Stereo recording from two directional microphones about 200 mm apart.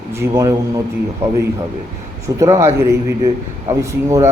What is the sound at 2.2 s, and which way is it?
A man's voice, 15° right (ahead or behind).